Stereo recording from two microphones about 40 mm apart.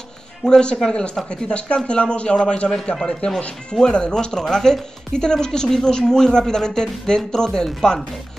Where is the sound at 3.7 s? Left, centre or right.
Left.